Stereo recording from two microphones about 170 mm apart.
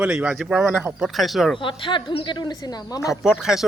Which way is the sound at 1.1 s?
Centre (ahead or behind).